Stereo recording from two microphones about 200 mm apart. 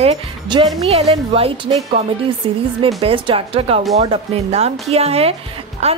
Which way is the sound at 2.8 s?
25° right (ahead or behind).